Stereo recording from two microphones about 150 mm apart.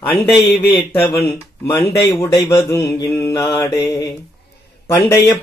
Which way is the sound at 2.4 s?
15° left (ahead or behind).